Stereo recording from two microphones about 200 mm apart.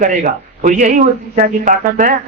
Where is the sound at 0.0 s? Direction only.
45° right (ahead or behind).